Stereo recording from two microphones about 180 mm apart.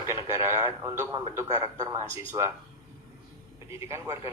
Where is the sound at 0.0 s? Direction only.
15° right (ahead or behind).